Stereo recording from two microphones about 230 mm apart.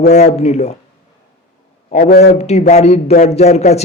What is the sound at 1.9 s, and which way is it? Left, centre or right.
Speech, left.